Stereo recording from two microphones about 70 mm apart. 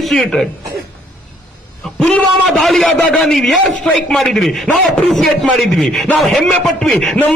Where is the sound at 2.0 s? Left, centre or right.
Centre.